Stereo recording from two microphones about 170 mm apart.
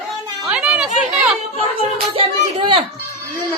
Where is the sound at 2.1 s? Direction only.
30° right (ahead or behind).